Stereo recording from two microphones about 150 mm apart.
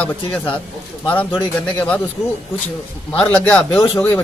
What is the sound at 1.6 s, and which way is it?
Speech, 10° left (ahead or behind).